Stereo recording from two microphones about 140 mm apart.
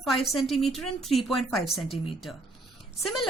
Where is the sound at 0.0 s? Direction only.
Centre (ahead or behind).